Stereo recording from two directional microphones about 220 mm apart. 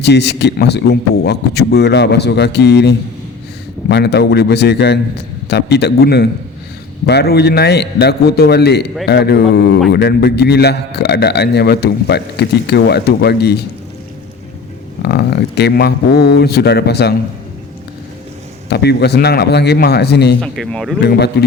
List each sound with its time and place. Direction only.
0.0 s a man's voice: 50° left (ahead or behind)
15.0 s a man's voice: 50° left (ahead or behind)
18.7 s a man's voice: 50° left (ahead or behind)
20.4 s speech: 5° left (ahead or behind)
21.0 s a man's voice: 50° left (ahead or behind)